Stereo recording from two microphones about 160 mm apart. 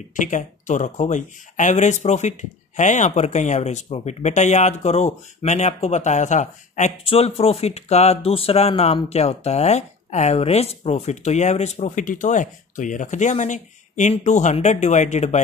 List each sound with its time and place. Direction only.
0.1 s speech: 50° left (ahead or behind)